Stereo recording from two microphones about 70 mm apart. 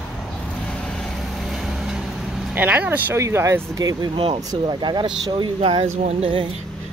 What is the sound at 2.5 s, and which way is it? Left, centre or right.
Speech, right.